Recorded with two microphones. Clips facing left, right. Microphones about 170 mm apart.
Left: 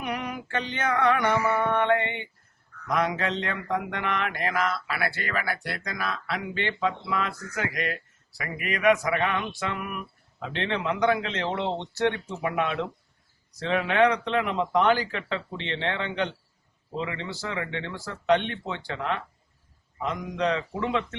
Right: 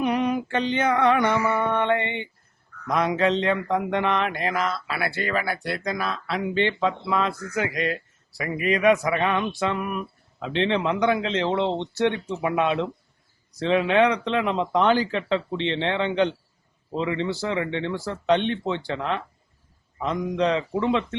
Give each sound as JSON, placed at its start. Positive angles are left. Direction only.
{"t": 0.0, "sound": "female singing", "side_deg": -25}
{"t": 1.7, "sound": "mantra", "side_deg": -25}